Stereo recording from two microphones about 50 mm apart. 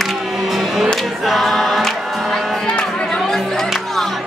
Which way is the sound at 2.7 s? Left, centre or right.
Centre.